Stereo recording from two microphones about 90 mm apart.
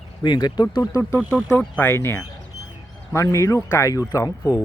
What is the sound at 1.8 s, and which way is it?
Speech, 25° left (ahead or behind).